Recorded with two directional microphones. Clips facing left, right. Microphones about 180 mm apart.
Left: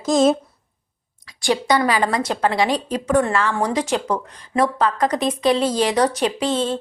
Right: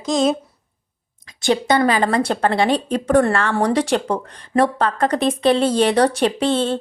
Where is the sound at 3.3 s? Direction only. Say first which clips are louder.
Right 1 dB; 60° right (ahead or behind).